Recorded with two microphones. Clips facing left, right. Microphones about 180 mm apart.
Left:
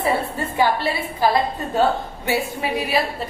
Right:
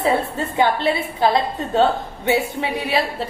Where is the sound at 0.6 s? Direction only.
20° right (ahead or behind).